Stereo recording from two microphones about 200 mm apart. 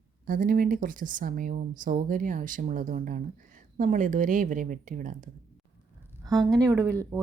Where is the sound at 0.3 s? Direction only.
45° right (ahead or behind).